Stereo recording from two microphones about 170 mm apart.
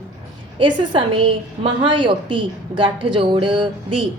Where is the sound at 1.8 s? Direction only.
30° right (ahead or behind).